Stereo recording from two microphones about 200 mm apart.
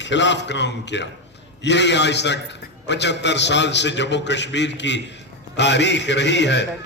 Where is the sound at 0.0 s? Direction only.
65° left (ahead or behind).